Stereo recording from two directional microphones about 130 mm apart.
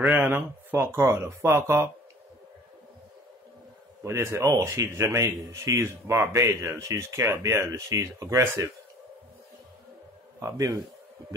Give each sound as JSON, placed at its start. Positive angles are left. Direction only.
{"t": 0.0, "sound": "speech", "side_deg": -15}
{"t": 4.0, "sound": "speech", "side_deg": -25}
{"t": 10.4, "sound": "speech", "side_deg": -25}